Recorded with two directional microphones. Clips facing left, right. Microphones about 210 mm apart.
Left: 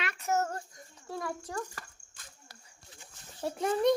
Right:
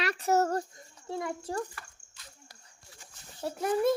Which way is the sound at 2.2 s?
50° left (ahead or behind).